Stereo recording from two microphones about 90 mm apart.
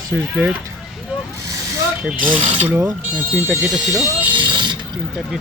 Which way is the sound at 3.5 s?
Centre (ahead or behind).